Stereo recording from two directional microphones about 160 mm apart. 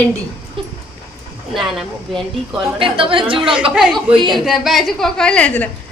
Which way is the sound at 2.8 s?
35° right (ahead or behind).